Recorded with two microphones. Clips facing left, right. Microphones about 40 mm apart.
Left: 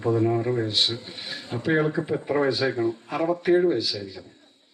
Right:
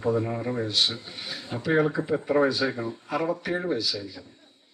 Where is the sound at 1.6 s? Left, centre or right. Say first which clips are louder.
Even; centre.